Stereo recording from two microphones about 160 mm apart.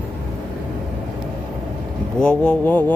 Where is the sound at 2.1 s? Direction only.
5° left (ahead or behind).